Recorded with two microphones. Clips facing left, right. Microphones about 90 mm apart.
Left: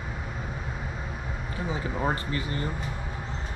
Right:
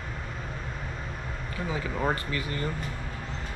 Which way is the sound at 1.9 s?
10° left (ahead or behind).